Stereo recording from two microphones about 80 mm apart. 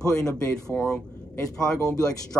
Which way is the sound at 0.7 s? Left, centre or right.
Centre.